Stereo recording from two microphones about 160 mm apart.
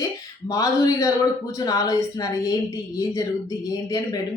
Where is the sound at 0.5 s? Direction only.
20° left (ahead or behind).